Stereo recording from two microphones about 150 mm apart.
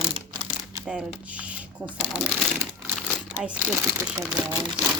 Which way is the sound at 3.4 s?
5° right (ahead or behind).